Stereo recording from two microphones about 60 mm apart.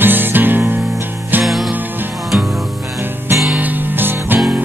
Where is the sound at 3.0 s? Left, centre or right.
Right.